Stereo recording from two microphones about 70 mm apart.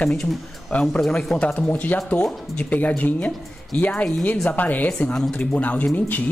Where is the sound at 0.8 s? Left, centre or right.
Centre; by 4.9 s left.